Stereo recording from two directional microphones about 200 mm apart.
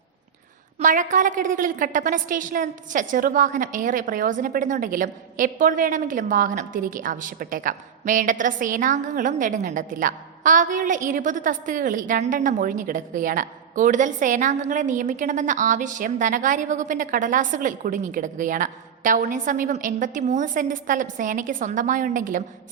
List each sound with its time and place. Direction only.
0.8 s a woman's voice: 40° right (ahead or behind)